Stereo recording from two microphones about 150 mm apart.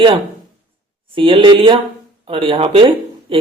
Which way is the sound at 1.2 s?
35° right (ahead or behind).